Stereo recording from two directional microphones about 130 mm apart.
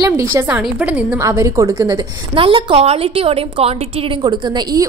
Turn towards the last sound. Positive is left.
turn(degrees=-35)  # may be behind; listen again after turning